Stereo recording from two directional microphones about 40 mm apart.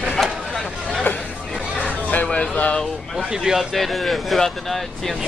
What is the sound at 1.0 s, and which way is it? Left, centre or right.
Chatter, left.